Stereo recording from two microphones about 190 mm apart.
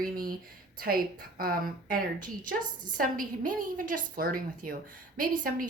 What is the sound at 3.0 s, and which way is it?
A woman's voice, 45° right (ahead or behind).